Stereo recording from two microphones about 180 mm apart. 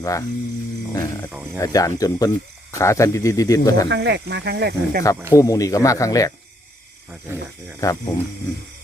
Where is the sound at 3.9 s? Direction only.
70° right (ahead or behind).